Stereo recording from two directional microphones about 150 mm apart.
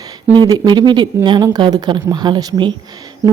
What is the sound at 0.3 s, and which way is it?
A woman's voice, 25° right (ahead or behind).